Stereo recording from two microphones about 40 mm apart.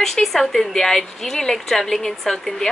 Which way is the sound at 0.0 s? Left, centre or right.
Centre.